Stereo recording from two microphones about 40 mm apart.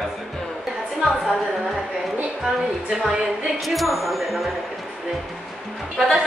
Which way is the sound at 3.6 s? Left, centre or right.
Centre.